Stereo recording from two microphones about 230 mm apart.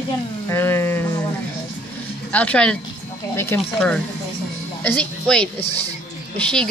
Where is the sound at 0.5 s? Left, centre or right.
Centre.